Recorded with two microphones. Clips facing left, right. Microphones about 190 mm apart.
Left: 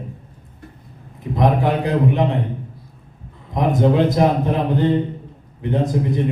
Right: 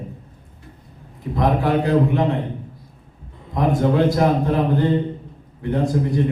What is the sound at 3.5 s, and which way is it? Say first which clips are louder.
A man's voice: left 1 dB; 20° left (ahead or behind).